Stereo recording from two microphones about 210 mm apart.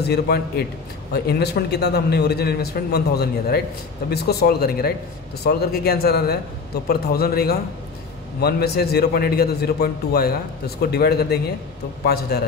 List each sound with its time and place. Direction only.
0.0 s a man's voice: 50° left (ahead or behind)